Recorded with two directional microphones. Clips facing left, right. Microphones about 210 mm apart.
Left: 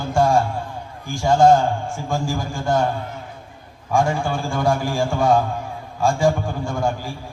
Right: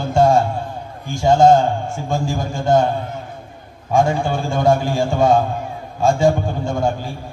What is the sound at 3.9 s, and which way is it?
A man's voice, 20° right (ahead or behind).